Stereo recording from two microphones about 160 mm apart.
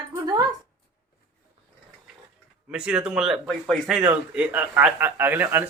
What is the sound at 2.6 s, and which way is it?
A man's voice, 5° right (ahead or behind).